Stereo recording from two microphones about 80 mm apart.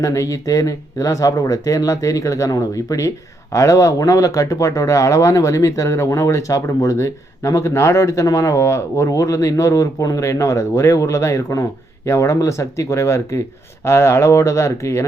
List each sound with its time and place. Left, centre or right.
0.0 s speech: left